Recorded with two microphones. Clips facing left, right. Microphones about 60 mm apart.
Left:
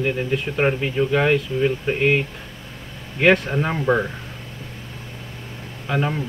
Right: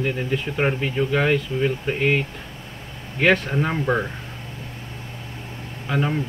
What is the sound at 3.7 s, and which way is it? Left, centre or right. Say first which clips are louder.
Speech: left 4 dB; centre.